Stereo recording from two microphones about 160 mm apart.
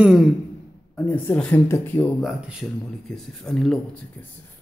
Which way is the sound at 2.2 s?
Centre (ahead or behind).